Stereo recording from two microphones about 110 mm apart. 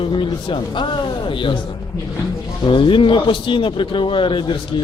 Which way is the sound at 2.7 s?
50° left (ahead or behind).